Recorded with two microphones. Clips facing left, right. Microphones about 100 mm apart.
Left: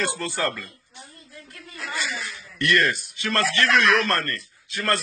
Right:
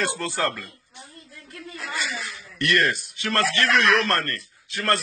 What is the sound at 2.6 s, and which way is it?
Speech, 25° right (ahead or behind).